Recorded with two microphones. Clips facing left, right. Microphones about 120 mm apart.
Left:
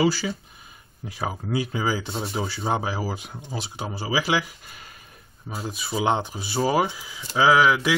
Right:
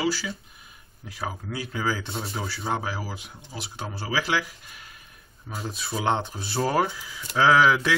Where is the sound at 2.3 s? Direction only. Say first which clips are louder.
Left 4 dB; 25° left (ahead or behind).